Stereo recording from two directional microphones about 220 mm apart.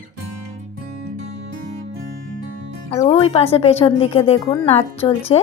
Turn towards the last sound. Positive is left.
turn(degrees=25)  # may be behind; listen again after turning